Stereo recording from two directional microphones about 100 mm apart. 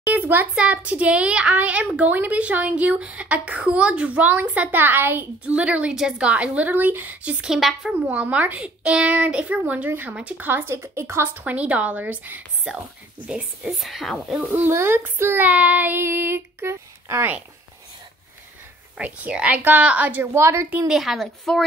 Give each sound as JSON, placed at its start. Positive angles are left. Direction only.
{"t": 0.1, "sound": "a child's voice", "side_deg": -15}
{"t": 7.4, "sound": "speech", "side_deg": -5}
{"t": 8.1, "sound": "a child's voice", "side_deg": -15}
{"t": 14.3, "sound": "a child's voice", "side_deg": -15}
{"t": 18.9, "sound": "a child's voice", "side_deg": -10}
{"t": 20.7, "sound": "speech", "side_deg": -5}